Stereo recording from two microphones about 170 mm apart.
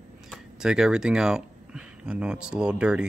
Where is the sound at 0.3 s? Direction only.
5° right (ahead or behind).